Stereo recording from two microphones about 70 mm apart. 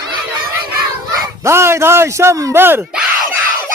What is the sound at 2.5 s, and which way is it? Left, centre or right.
Speech, right.